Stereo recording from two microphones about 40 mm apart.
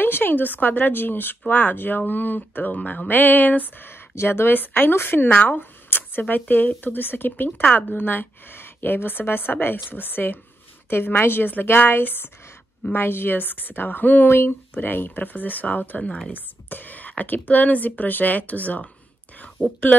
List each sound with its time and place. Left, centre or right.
0.0 s speech: left
2.7 s speech: left
3.1 s a woman's voice: left
4.6 s a woman's voice: left
5.3 s speech: left
5.6 s a woman's voice: left
10.9 s a woman's voice: left
19.3 s a sound: left